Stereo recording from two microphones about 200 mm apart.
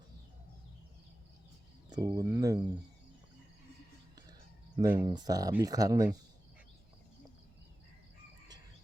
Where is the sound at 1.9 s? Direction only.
20° right (ahead or behind).